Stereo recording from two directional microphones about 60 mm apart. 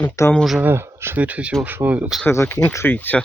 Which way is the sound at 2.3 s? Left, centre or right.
Left.